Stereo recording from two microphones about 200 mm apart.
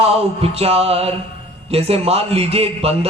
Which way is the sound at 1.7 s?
30° right (ahead or behind).